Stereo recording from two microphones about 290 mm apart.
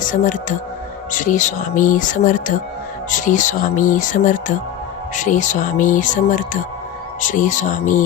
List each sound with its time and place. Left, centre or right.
0.0 s speech: left